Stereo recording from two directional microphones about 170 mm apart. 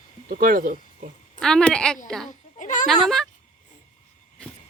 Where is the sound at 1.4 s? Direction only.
5° left (ahead or behind).